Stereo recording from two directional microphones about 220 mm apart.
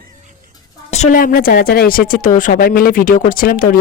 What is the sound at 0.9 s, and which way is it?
A woman's voice, 35° left (ahead or behind).